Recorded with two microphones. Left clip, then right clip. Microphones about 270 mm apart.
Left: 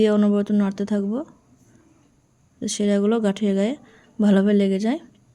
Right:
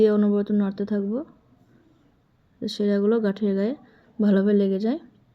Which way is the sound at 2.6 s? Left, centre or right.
Centre.